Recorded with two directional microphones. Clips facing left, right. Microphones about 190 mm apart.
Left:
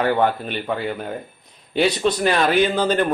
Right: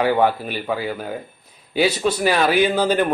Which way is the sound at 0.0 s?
10° right (ahead or behind).